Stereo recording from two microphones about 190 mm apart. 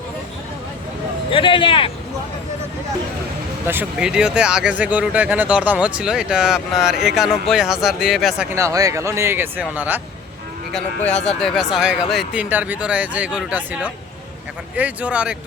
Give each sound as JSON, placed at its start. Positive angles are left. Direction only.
{"t": 1.3, "sound": "speech", "side_deg": 25}
{"t": 3.7, "sound": "speech", "side_deg": -5}
{"t": 8.5, "sound": "speech", "side_deg": -15}
{"t": 11.3, "sound": "speech", "side_deg": 5}